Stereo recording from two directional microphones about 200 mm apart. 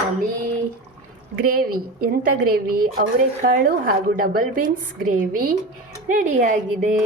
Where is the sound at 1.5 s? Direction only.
45° right (ahead or behind).